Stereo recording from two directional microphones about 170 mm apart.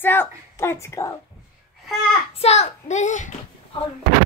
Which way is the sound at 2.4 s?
40° left (ahead or behind).